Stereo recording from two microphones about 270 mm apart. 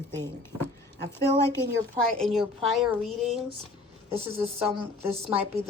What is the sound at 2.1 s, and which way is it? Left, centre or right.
Speech, centre.